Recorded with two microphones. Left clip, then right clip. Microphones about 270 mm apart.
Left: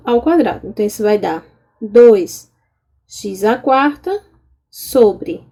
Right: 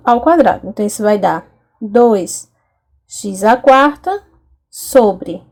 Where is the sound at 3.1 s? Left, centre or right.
Centre.